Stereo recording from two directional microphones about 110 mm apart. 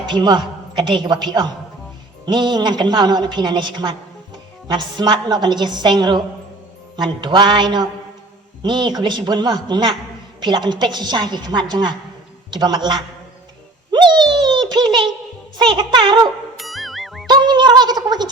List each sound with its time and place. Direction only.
0.0 s a woman's voice: 45° right (ahead or behind)
6.9 s music: 45° right (ahead or behind)
8.6 s a woman's voice: 40° right (ahead or behind)
15.5 s music: 40° right (ahead or behind)
16.6 s music: centre (ahead or behind)
17.2 s a sound: 40° right (ahead or behind)